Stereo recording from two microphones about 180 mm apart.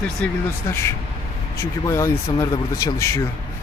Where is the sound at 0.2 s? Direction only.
10° left (ahead or behind).